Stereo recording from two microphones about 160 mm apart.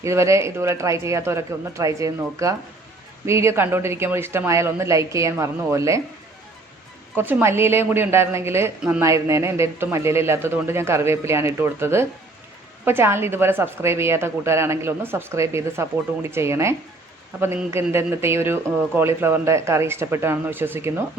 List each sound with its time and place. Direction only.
0.0 s a woman's voice: 20° right (ahead or behind)
7.2 s a woman's voice: 15° right (ahead or behind)
9.0 s a woman's voice: 20° right (ahead or behind)